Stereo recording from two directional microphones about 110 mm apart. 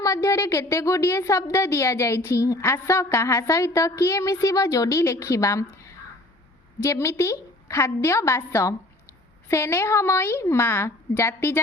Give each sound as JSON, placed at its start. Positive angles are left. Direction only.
{"t": 0.0, "sound": "a woman's voice", "side_deg": 30}